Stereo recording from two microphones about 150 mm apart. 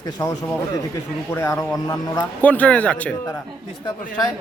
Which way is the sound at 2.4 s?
10° left (ahead or behind).